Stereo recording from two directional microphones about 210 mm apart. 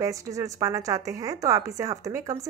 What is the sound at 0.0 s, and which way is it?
Speech, 15° right (ahead or behind).